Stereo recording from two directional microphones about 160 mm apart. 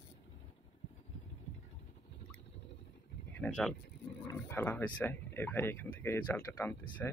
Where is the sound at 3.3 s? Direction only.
10° left (ahead or behind).